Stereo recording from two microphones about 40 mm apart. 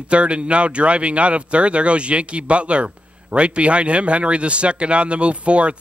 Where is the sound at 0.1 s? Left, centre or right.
Right.